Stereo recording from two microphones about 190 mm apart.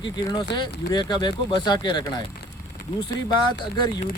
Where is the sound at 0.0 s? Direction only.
25° left (ahead or behind).